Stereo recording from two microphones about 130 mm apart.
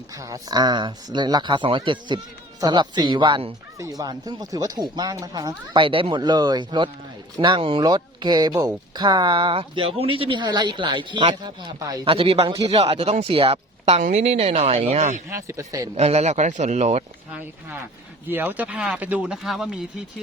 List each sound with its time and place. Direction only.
0.1 s speech: 25° right (ahead or behind)
5.7 s speech: 40° right (ahead or behind)
11.8 s speech: 25° right (ahead or behind)
12.0 s speech: 45° right (ahead or behind)
15.3 s speech: 20° right (ahead or behind)
16.0 s speech: 55° right (ahead or behind)
18.3 s speech: 15° right (ahead or behind)